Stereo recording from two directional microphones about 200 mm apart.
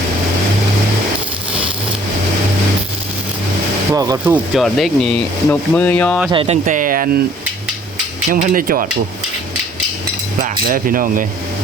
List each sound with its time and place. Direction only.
3.9 s speech: 20° right (ahead or behind)
4.6 s speech: 5° left (ahead or behind)
6.3 s speech: 30° right (ahead or behind)
8.3 s speech: 45° right (ahead or behind)
10.7 s speech: 45° right (ahead or behind)